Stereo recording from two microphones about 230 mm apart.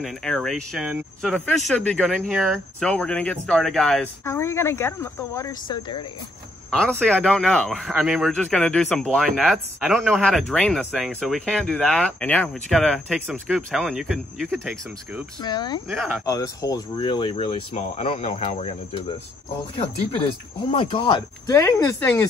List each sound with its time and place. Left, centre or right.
0.0 s a man's voice: centre
6.7 s a man's voice: centre
15.4 s speech: centre
20.7 s speech: left